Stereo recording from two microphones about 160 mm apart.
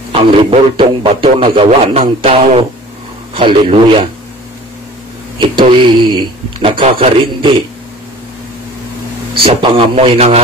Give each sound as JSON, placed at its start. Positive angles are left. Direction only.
{"t": 0.1, "sound": "speech", "side_deg": -35}
{"t": 5.4, "sound": "speech", "side_deg": -30}
{"t": 9.6, "sound": "speech", "side_deg": -35}